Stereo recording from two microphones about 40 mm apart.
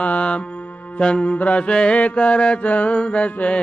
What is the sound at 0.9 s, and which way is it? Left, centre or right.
Mantra, left.